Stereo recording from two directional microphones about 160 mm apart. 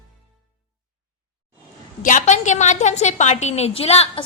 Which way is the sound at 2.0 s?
50° left (ahead or behind).